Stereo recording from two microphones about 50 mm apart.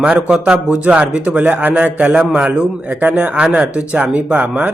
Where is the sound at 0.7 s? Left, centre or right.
Right.